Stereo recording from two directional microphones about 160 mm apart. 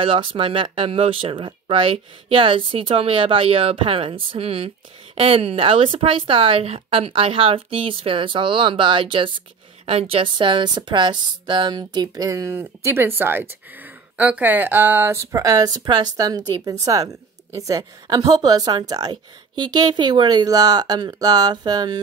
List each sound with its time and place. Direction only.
0.0 s speech: 35° right (ahead or behind)